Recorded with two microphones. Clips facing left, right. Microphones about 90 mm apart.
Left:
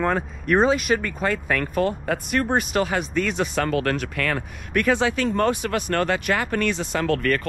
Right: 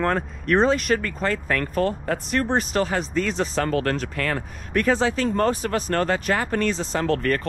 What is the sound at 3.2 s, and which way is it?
Speech, 35° right (ahead or behind).